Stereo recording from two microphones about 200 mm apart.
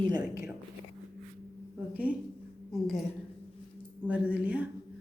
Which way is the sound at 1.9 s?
5° right (ahead or behind).